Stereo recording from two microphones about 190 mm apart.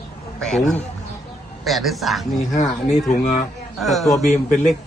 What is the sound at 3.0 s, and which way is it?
Speech, 40° left (ahead or behind).